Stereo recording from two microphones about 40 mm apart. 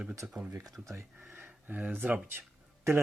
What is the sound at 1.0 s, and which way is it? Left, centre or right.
Speech, right.